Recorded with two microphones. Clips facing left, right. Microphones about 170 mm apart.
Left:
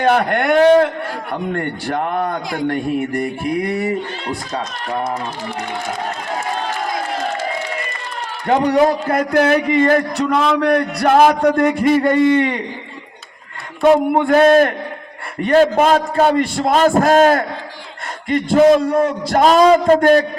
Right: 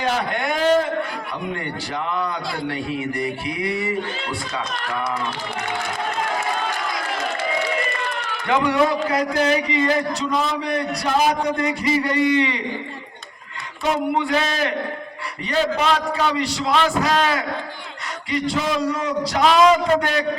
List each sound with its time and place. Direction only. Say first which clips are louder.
0.0 s a man's voice: left 7 dB; 60° left (ahead or behind)
8.4 s a man's voice: left 5 dB; 40° left (ahead or behind)
13.8 s a man's voice: left 9 dB; 55° left (ahead or behind)